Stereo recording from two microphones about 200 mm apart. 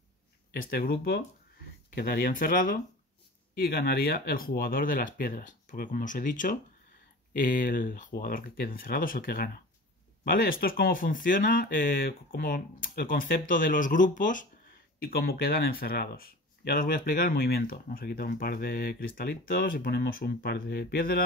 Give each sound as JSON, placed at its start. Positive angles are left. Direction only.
{"t": 0.5, "sound": "speech", "side_deg": 50}